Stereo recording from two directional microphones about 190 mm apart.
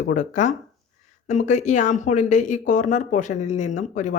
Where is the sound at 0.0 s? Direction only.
40° left (ahead or behind).